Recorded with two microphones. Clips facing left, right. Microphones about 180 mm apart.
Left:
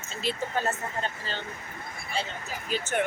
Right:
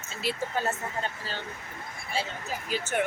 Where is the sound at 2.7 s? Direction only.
10° right (ahead or behind).